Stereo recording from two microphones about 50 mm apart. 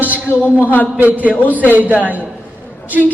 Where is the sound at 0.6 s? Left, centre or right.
Left.